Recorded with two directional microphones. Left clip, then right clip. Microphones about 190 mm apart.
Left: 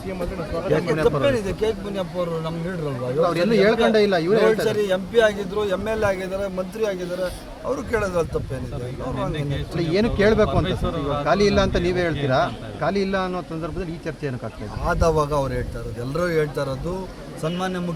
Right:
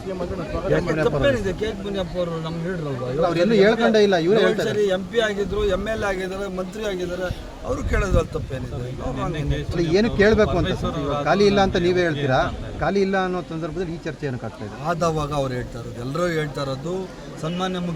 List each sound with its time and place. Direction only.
1.0 s a man's voice: 10° left (ahead or behind)
3.2 s a man's voice: 15° right (ahead or behind)
4.6 s a man's voice: 10° left (ahead or behind)
9.7 s a man's voice: 20° right (ahead or behind)
10.7 s speech: 35° left (ahead or behind)
11.3 s a man's voice: 20° right (ahead or behind)
14.8 s a man's voice: 5° left (ahead or behind)